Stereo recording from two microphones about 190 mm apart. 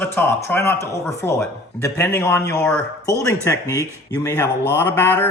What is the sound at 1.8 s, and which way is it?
A man's voice, 10° left (ahead or behind).